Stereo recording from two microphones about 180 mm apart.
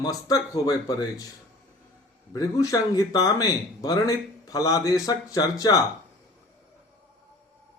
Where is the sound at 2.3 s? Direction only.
20° left (ahead or behind).